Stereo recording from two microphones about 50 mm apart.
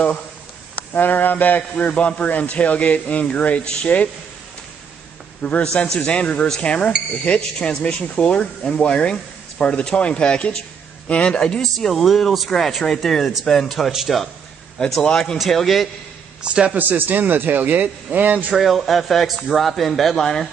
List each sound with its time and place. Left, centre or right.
0.9 s speech: left
5.4 s speech: left
11.6 s speech: centre
15.0 s speech: centre
15.3 s speech: centre
16.4 s a man's voice: right
16.7 s a man's voice: right
18.5 s speech: centre